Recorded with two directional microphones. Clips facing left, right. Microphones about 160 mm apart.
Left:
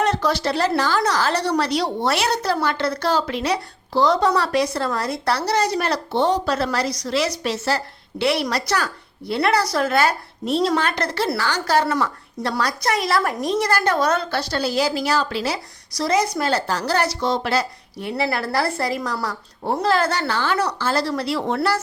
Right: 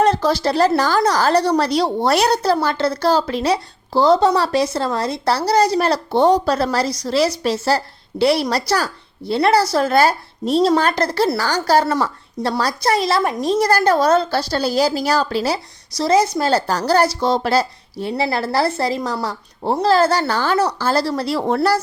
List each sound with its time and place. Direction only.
0.0 s a woman's voice: 30° right (ahead or behind)
16.0 s a woman's voice: 25° right (ahead or behind)